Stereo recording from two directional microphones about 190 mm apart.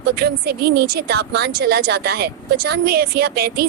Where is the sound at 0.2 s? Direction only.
55° right (ahead or behind).